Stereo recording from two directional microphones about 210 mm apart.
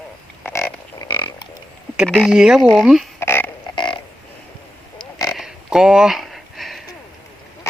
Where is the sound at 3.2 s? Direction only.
10° left (ahead or behind).